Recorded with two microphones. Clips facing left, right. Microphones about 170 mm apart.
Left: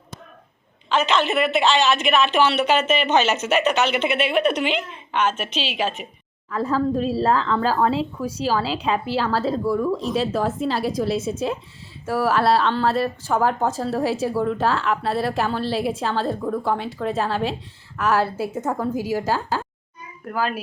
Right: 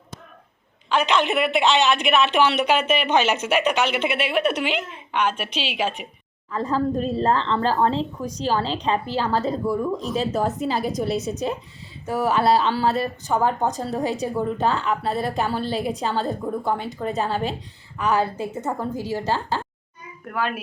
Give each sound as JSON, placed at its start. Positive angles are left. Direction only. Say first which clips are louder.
{"t": 0.9, "sound": "a woman's voice", "louder": "even", "side_deg": -10}
{"t": 6.5, "sound": "a woman's voice", "louder": "left 1 dB", "side_deg": 5}
{"t": 9.6, "sound": "a woman's voice", "louder": "left 2 dB", "side_deg": -15}
{"t": 10.0, "sound": "a woman's voice", "louder": "left 1 dB", "side_deg": 0}